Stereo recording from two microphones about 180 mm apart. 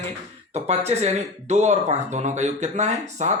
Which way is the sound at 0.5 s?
35° right (ahead or behind).